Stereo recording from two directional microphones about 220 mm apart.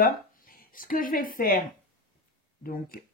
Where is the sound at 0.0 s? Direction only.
40° left (ahead or behind).